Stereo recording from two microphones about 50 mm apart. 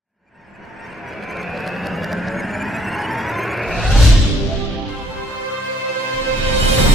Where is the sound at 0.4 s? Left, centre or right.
Centre.